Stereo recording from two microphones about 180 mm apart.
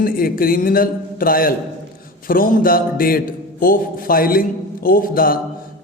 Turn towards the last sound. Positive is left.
turn(degrees=55)  # may be behind; listen again after turning